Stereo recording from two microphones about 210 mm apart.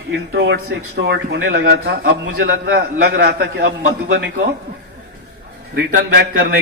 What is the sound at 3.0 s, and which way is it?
A man's voice, 50° right (ahead or behind).